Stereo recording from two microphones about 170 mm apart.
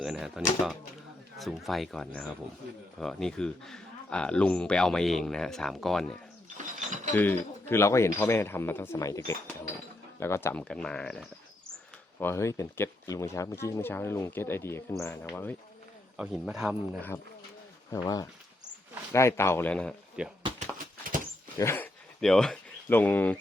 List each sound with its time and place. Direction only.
0.0 s speech: centre (ahead or behind)
6.6 s mechanisms: 45° right (ahead or behind)
7.7 s speech: 15° left (ahead or behind)
12.2 s speech: 15° left (ahead or behind)
16.1 s speech: 5° right (ahead or behind)
17.9 s speech: 20° left (ahead or behind)
20.2 s speech: 5° right (ahead or behind)
20.6 s horse: 50° right (ahead or behind)
21.6 s speech: 15° left (ahead or behind)
22.2 s speech: 5° left (ahead or behind)